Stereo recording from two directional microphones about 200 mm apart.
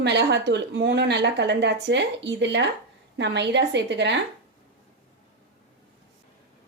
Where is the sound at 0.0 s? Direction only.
60° right (ahead or behind).